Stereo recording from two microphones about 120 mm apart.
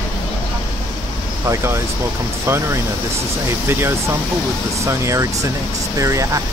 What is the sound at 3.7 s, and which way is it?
Speech, 20° right (ahead or behind).